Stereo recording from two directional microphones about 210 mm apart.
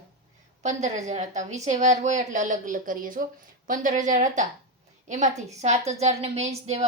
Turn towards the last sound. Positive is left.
turn(degrees=-30)  # may be behind; listen again after turning